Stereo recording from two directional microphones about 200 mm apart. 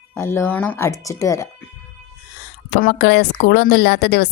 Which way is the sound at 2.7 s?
50° left (ahead or behind).